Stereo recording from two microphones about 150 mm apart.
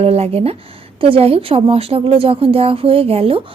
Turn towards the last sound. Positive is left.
turn(degrees=-40)  # may be behind; listen again after turning